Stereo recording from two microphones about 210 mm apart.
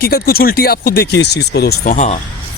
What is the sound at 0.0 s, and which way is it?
Speech, 45° left (ahead or behind).